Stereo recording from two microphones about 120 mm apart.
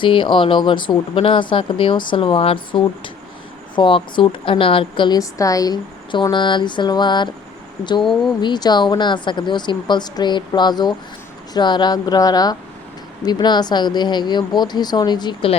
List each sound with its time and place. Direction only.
0.0 s speech: 45° left (ahead or behind)
8.0 s speech: 5° left (ahead or behind)
8.4 s speech: 35° left (ahead or behind)